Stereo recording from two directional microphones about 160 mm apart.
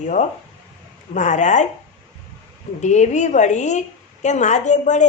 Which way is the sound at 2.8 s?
50° left (ahead or behind).